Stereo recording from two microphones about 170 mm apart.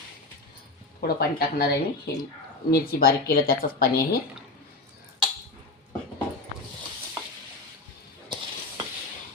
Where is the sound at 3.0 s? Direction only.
60° left (ahead or behind).